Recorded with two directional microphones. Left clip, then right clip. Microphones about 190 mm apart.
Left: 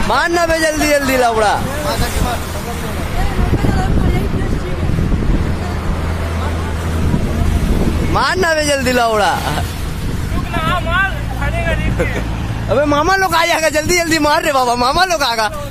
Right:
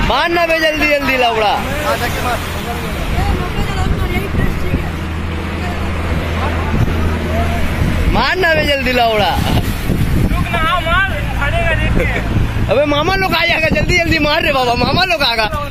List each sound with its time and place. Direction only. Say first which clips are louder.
0.1 s a man's voice: even; 10° left (ahead or behind)
8.2 s a man's voice: right 1 dB; 20° left (ahead or behind)
10.5 s vehicle: right 2 dB; 5° right (ahead or behind)
12.7 s a man's voice: left 1 dB; centre (ahead or behind)
13.2 s a man's voice: left 1 dB; 20° left (ahead or behind)